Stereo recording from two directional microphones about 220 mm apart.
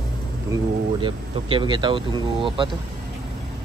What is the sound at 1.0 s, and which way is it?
Speech, 20° right (ahead or behind).